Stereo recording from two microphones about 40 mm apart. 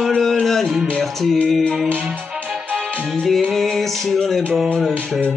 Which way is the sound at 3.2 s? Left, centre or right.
Centre.